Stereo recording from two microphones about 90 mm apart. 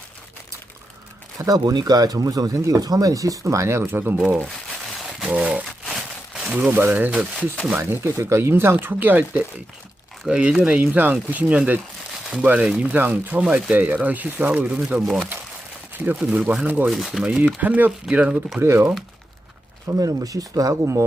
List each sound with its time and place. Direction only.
1.4 s speech: 45° right (ahead or behind); by 4.1 s 25° right (ahead or behind)
5.2 s a sound: 10° right (ahead or behind)
5.8 s a sound: centre (ahead or behind)
6.6 s speech: 20° right (ahead or behind)
7.3 s speech: 10° left (ahead or behind)
7.8 s speech: 30° right (ahead or behind)
10.2 s speech: 10° right (ahead or behind)
15.0 s speech: centre (ahead or behind)
16.0 s speech: 20° right (ahead or behind)
16.9 s speech: centre (ahead or behind)
17.4 s speech: 20° right (ahead or behind)
18.6 s speech: 25° right (ahead or behind)
20.0 s speech: 40° right (ahead or behind)